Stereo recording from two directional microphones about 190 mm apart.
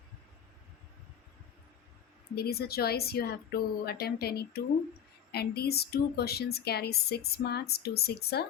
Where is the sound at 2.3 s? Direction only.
55° left (ahead or behind).